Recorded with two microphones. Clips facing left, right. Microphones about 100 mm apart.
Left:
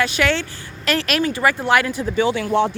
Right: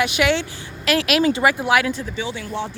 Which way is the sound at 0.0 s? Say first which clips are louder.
Even; 15° right (ahead or behind).